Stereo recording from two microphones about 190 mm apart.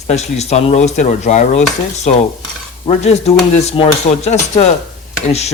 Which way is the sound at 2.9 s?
35° left (ahead or behind).